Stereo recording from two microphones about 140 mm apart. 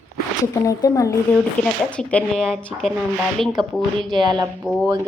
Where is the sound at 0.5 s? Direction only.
25° left (ahead or behind).